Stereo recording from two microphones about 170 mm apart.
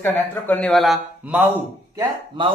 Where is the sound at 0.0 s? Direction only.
10° left (ahead or behind).